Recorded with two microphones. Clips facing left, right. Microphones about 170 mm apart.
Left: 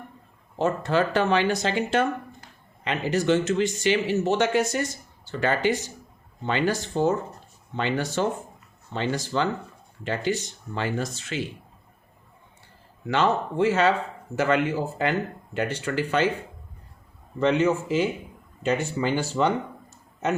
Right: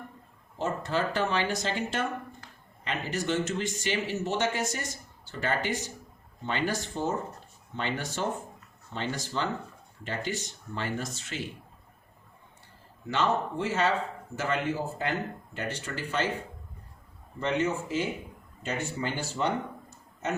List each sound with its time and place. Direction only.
0.6 s speech: 70° left (ahead or behind)
2.8 s speech: 85° left
13.1 s speech: 85° left
17.4 s speech: 90° left